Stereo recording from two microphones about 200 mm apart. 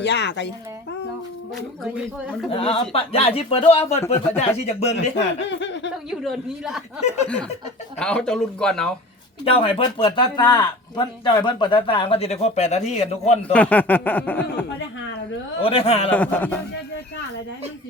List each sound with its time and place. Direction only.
0.0 s speech: 60° left (ahead or behind)
1.8 s speech: centre (ahead or behind)
2.5 s speech: 30° left (ahead or behind)
5.4 s speech: 65° left (ahead or behind)
6.1 s speech: centre (ahead or behind)
7.9 s speech: 5° left (ahead or behind)
9.4 s speech: 30° left (ahead or behind)
13.5 s a sound: 5° left (ahead or behind)
15.6 s speech: 30° left (ahead or behind)
16.0 s a sound: 10° left (ahead or behind)